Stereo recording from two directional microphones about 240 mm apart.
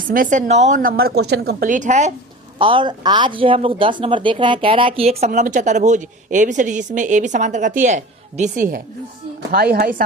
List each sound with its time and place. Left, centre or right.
0.1 s a woman's voice: right